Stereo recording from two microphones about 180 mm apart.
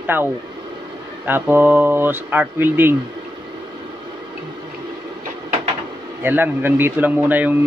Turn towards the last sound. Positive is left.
turn(degrees=-10)  # may be behind; listen again after turning